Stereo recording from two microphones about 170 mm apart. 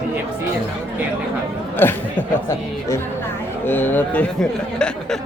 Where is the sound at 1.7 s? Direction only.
10° left (ahead or behind).